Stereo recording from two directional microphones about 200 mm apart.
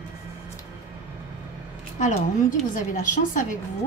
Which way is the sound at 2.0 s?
40° left (ahead or behind).